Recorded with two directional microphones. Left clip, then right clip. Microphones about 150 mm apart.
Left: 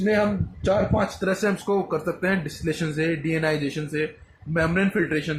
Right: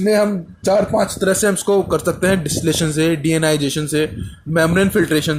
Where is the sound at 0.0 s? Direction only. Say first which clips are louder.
Right 7 dB; 60° right (ahead or behind).